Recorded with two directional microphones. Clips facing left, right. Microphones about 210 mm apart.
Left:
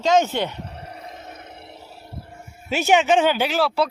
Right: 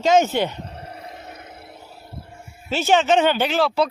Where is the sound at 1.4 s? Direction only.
5° right (ahead or behind).